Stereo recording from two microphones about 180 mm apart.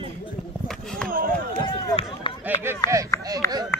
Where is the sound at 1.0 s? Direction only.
50° right (ahead or behind).